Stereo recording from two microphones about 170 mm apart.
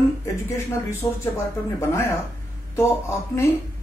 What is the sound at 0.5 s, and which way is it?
Speech, 15° left (ahead or behind).